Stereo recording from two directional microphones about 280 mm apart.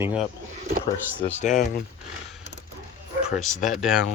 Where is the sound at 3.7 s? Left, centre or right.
Centre.